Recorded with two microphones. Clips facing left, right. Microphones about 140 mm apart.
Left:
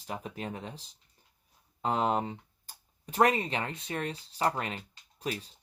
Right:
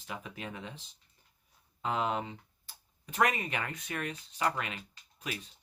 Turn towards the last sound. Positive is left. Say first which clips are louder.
# left 5 dB
turn(degrees=35)  # may be behind; listen again after turning